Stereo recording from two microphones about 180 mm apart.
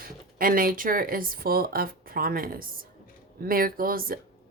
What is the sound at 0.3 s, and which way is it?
Speech, 50° right (ahead or behind).